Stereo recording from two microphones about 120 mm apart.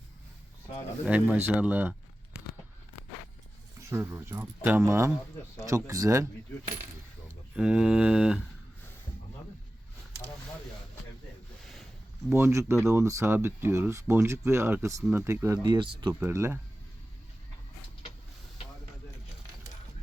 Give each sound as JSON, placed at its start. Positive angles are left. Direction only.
{"t": 1.0, "sound": "speech", "side_deg": -10}
{"t": 3.8, "sound": "speech", "side_deg": -25}
{"t": 7.5, "sound": "speech", "side_deg": -10}
{"t": 11.6, "sound": "a sound", "side_deg": 0}
{"t": 12.3, "sound": "speech", "side_deg": -20}
{"t": 15.6, "sound": "speech", "side_deg": -40}
{"t": 16.2, "sound": "speech", "side_deg": -20}